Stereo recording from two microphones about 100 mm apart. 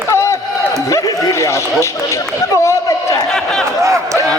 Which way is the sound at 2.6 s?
30° left (ahead or behind).